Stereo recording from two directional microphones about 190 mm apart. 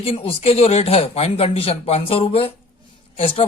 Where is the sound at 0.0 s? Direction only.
30° left (ahead or behind).